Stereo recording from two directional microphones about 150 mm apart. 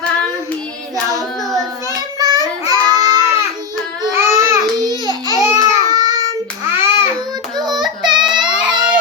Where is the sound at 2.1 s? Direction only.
25° right (ahead or behind).